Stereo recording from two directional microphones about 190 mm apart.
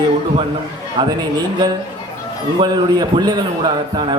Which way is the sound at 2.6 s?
20° right (ahead or behind).